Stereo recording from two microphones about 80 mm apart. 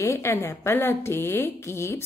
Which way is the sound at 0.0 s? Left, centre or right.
Left.